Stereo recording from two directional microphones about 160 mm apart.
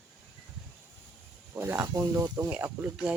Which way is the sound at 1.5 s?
15° right (ahead or behind).